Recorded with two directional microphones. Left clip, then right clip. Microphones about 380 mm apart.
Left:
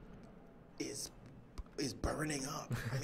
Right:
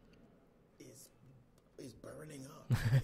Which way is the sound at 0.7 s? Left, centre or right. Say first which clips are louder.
Left 14 dB; left.